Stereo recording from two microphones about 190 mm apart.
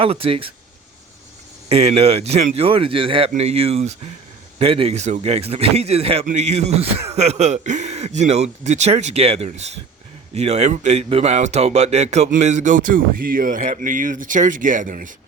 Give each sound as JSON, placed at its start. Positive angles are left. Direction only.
{"t": 0.0, "sound": "speech", "side_deg": -30}
{"t": 1.7, "sound": "a man's voice", "side_deg": -35}